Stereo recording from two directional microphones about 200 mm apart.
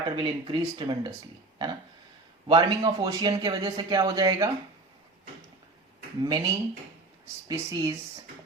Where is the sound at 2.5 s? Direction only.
20° right (ahead or behind).